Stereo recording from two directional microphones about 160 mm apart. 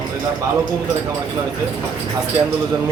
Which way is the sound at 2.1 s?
20° right (ahead or behind).